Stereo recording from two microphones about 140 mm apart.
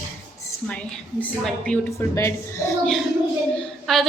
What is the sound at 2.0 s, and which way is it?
Speech, 20° left (ahead or behind).